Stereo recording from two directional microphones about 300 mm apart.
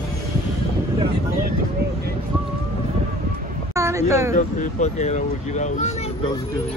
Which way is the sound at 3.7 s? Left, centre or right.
Centre.